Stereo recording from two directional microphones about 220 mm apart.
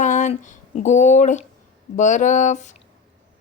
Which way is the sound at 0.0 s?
35° left (ahead or behind).